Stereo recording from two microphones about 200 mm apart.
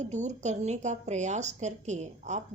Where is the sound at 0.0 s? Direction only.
35° right (ahead or behind).